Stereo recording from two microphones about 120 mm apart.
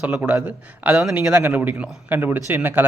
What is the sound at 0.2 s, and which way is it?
Speech, 10° right (ahead or behind).